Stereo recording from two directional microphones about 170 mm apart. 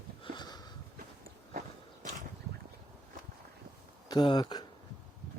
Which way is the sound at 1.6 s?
50° right (ahead or behind).